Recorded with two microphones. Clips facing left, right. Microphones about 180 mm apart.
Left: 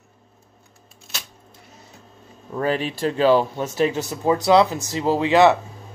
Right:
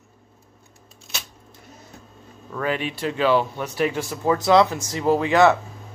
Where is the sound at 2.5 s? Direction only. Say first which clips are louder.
Left 3 dB; 35° left (ahead or behind); by 5.6 s 15° left (ahead or behind).